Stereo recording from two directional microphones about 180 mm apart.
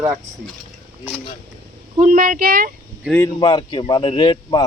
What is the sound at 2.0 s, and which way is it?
Speech, 50° right (ahead or behind).